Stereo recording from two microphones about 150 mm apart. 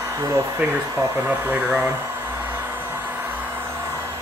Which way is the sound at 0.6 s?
10° right (ahead or behind).